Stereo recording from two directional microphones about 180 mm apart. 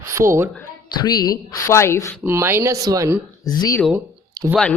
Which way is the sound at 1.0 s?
20° left (ahead or behind).